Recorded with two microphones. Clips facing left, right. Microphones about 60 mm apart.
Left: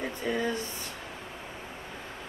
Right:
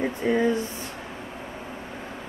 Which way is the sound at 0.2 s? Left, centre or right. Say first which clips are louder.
Right 8 dB; right.